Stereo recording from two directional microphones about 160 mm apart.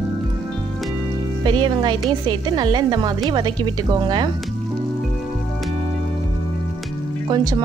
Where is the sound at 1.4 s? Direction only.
30° right (ahead or behind).